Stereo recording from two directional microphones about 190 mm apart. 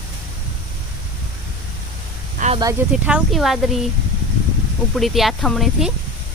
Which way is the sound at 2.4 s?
40° right (ahead or behind).